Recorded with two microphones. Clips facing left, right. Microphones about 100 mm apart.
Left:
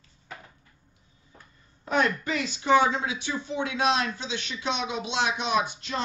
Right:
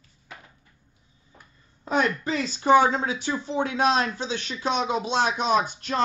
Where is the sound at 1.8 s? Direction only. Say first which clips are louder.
Right 1 dB; 25° right (ahead or behind).